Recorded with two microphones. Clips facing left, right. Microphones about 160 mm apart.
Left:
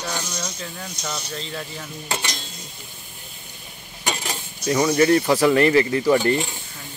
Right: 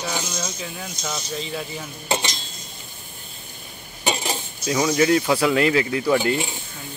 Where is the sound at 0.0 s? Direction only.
10° right (ahead or behind).